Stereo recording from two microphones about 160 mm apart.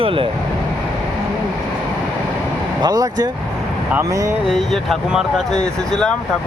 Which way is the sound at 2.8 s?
25° right (ahead or behind).